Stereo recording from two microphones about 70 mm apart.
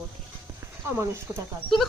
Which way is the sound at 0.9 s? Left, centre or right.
Right.